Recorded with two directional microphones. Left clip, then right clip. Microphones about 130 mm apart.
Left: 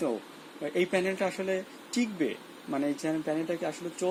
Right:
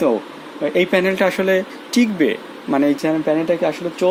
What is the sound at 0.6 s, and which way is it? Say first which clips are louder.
Speech: right 12 dB; 10° right (ahead or behind).